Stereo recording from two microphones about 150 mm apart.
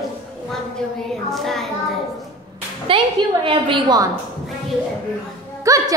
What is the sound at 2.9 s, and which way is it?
A woman's voice, 35° right (ahead or behind).